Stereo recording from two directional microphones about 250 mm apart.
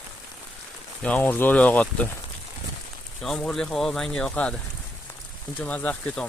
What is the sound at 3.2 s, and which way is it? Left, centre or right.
Speech, centre.